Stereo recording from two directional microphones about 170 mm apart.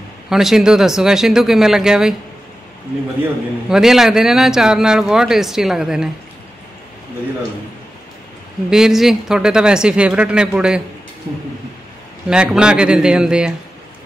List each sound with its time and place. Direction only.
0.3 s a man's voice: centre (ahead or behind)
3.2 s a man's voice: 5° right (ahead or behind)
8.6 s a man's voice: 5° right (ahead or behind)
12.3 s a man's voice: 5° right (ahead or behind)